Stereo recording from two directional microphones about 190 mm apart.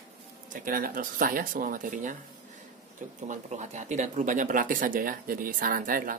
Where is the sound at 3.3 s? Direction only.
40° right (ahead or behind).